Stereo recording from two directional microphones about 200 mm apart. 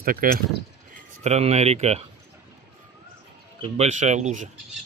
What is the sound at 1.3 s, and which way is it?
Speech, 35° right (ahead or behind).